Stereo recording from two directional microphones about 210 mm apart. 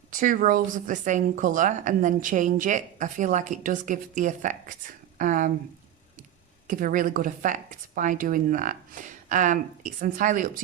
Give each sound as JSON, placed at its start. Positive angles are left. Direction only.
{"t": 0.1, "sound": "a woman's voice", "side_deg": -40}
{"t": 6.7, "sound": "a woman's voice", "side_deg": -40}